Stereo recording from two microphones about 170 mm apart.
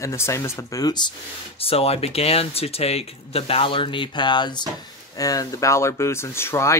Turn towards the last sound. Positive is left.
turn(degrees=15)  # may be behind; listen again after turning